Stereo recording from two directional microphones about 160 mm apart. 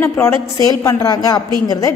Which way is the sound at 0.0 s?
15° left (ahead or behind).